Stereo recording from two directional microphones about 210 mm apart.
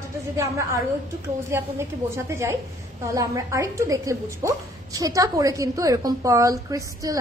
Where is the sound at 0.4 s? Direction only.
15° right (ahead or behind).